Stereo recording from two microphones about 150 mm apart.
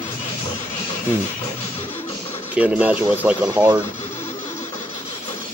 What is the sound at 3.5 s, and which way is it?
Speech, 30° right (ahead or behind).